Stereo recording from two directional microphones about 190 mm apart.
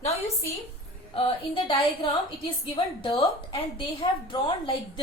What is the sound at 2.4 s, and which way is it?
A woman's voice, 25° left (ahead or behind).